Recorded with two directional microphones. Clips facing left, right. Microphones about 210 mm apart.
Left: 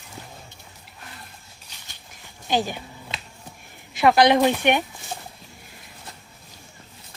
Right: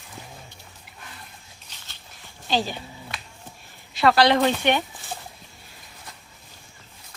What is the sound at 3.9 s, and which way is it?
Speech, 20° left (ahead or behind).